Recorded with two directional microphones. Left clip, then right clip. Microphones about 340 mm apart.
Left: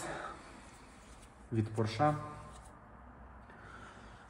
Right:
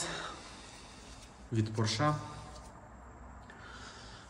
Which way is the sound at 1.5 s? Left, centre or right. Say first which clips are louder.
Even; centre.